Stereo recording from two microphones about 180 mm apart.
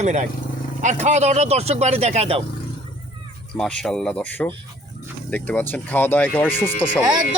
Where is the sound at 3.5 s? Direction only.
5° left (ahead or behind).